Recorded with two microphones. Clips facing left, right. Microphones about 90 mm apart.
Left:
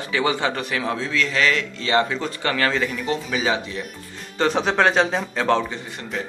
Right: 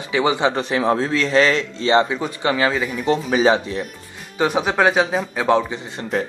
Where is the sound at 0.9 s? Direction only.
40° right (ahead or behind); by 2.8 s 15° right (ahead or behind).